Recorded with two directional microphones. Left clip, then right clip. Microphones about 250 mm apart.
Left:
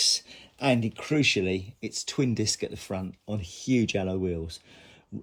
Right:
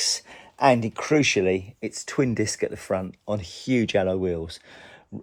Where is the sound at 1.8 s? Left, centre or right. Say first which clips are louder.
Right 4 dB; centre.